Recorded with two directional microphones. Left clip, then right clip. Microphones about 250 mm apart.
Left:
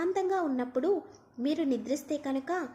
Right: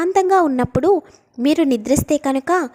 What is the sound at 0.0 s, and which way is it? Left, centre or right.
A woman's voice, right.